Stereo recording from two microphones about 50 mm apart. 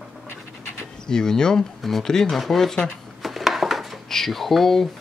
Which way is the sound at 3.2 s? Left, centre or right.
Centre.